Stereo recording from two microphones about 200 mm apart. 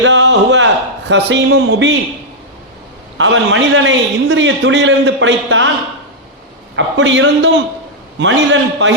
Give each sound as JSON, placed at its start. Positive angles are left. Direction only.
{"t": 0.0, "sound": "a man's voice", "side_deg": -65}
{"t": 3.2, "sound": "a man's voice", "side_deg": -70}
{"t": 6.7, "sound": "a man's voice", "side_deg": -65}